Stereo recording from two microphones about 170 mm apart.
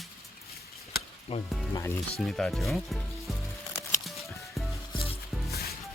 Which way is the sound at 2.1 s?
5° left (ahead or behind).